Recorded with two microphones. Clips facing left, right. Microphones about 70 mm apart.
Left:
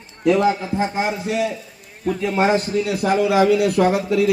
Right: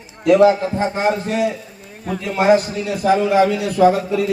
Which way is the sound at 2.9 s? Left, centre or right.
Left.